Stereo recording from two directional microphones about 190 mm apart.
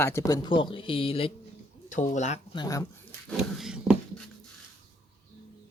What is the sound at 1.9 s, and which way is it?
Speech, 40° left (ahead or behind).